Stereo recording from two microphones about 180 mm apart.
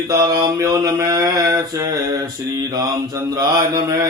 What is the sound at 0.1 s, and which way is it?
Mantra, 20° right (ahead or behind).